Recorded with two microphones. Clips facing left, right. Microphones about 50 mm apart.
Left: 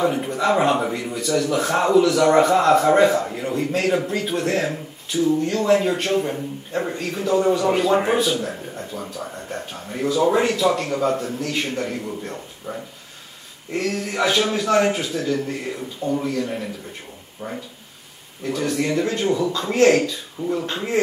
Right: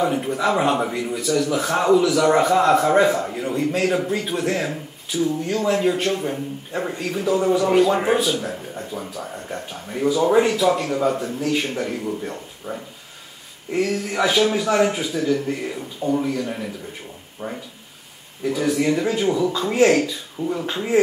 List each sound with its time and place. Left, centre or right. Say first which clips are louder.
0.0 s a man's voice: even; centre
8.9 s a man's voice: right 1 dB; centre
10.0 s a man's voice: right 1 dB; centre
12.7 s a man's voice: even; centre
17.4 s speech: right 1 dB; right
18.5 s a man's voice: right 2 dB; centre